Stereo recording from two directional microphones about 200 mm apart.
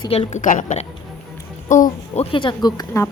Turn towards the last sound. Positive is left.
turn(degrees=20)  # may be behind; listen again after turning